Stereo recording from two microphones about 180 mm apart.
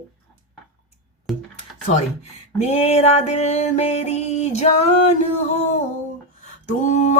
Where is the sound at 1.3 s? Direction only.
Centre (ahead or behind).